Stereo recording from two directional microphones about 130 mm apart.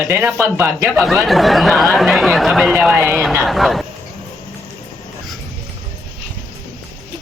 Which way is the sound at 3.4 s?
Centre (ahead or behind).